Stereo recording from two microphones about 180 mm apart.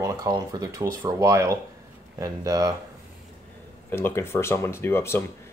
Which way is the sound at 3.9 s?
15° left (ahead or behind).